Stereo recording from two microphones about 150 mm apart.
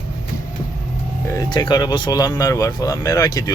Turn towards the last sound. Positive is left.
turn(degrees=25)  # may be behind; listen again after turning